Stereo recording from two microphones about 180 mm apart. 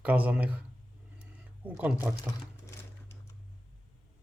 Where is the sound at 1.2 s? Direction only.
10° right (ahead or behind).